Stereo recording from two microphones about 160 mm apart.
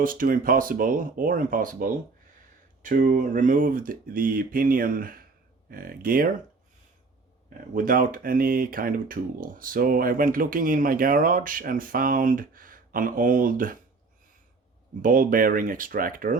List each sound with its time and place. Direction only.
0.0 s speech: 60° right (ahead or behind)
7.7 s speech: 60° right (ahead or behind)
15.0 s speech: 60° right (ahead or behind)